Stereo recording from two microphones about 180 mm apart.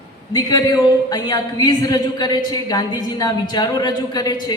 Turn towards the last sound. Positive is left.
turn(degrees=25)  # may be behind; listen again after turning